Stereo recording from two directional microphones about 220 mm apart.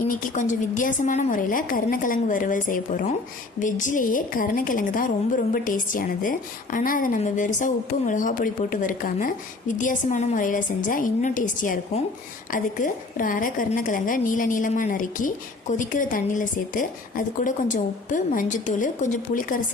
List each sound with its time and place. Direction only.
0.0 s a woman's voice: 40° left (ahead or behind)